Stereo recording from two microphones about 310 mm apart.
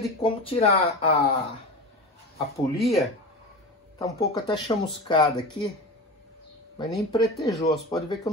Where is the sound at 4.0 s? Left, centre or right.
Centre.